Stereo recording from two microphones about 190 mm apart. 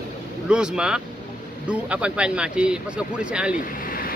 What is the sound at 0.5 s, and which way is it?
Speech, 5° right (ahead or behind).